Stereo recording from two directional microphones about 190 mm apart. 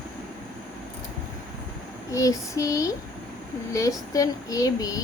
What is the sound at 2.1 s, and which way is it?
A woman's voice, 15° left (ahead or behind).